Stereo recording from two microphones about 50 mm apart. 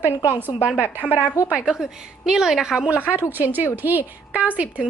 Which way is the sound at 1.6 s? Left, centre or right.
Centre.